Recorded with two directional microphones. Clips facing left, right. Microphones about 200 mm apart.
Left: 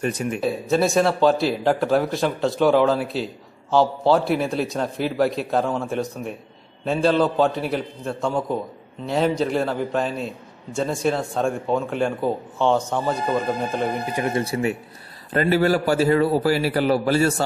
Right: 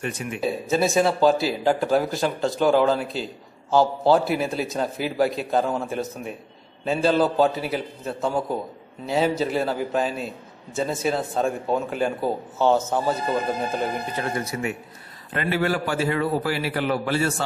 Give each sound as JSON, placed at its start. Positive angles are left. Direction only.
{"t": 0.0, "sound": "a man's voice", "side_deg": 40}
{"t": 0.4, "sound": "a man's voice", "side_deg": 0}
{"t": 14.1, "sound": "a man's voice", "side_deg": 25}